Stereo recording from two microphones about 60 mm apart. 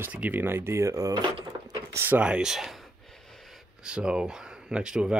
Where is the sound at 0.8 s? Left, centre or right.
Right.